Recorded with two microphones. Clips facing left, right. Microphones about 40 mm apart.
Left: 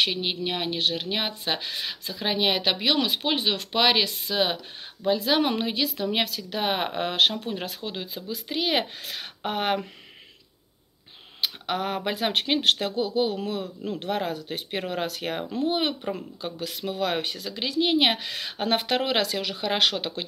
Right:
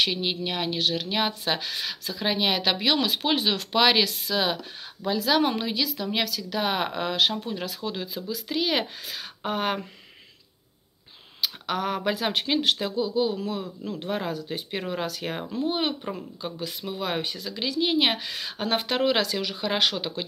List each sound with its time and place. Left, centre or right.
0.1 s speech: centre
11.4 s speech: left